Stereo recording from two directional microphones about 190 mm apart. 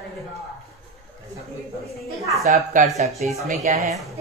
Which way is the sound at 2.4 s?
40° right (ahead or behind).